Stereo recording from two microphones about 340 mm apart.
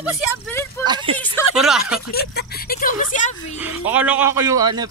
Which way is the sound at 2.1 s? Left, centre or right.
Left.